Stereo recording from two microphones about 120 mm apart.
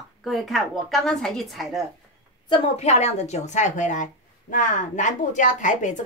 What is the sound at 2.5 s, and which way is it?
A woman's voice, 60° left (ahead or behind).